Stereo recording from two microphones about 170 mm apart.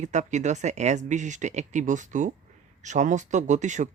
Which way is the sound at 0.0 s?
45° right (ahead or behind).